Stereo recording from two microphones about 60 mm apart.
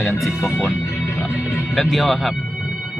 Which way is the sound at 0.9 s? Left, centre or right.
Left.